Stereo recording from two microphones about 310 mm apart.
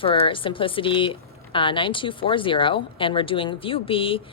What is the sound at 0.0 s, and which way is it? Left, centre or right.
Speech, centre.